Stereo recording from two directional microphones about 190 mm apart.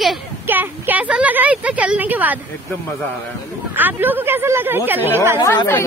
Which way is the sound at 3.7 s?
10° right (ahead or behind).